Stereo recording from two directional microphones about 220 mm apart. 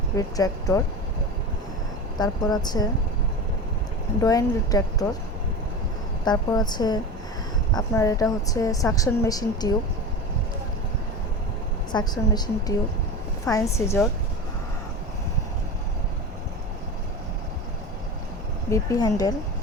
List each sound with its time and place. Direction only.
0.2 s a woman's voice: 15° left (ahead or behind)
2.1 s a woman's voice: 20° left (ahead or behind)
4.2 s a woman's voice: 15° left (ahead or behind)
6.2 s a woman's voice: 20° left (ahead or behind)
11.9 s a woman's voice: 20° left (ahead or behind)
18.7 s a woman's voice: 15° left (ahead or behind)